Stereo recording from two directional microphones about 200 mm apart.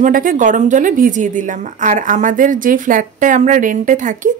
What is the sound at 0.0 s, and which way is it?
A woman's voice, 45° right (ahead or behind).